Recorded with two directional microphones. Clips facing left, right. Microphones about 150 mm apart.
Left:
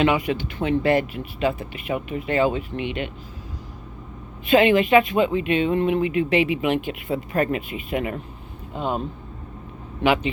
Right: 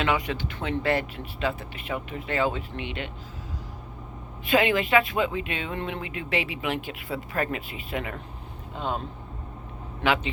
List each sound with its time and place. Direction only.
0.0 s speech: 15° left (ahead or behind)
4.4 s speech: 20° left (ahead or behind)
10.0 s speech: 15° left (ahead or behind)